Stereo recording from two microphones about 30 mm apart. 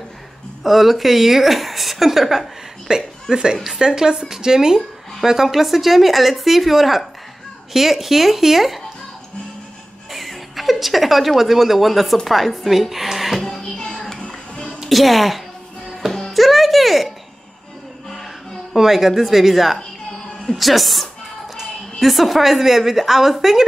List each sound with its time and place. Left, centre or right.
0.7 s a woman's voice: centre
2.9 s a woman's voice: right; by 8.8 s centre
10.1 s a woman's voice: centre
13.6 s music: left
14.9 s a woman's voice: centre
16.1 s music: centre
18.8 s a woman's voice: centre